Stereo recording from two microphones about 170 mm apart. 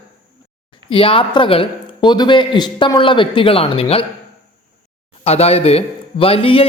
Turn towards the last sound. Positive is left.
turn(degrees=35)  # may be behind; listen again after turning